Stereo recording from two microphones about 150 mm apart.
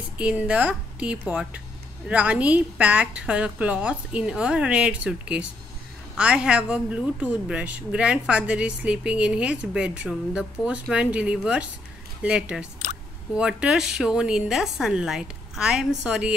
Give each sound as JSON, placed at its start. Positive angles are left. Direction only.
{"t": 0.2, "sound": "a woman's voice", "side_deg": -10}